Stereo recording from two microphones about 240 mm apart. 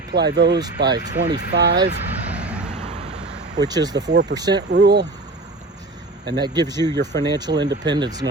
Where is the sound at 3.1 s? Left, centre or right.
Centre.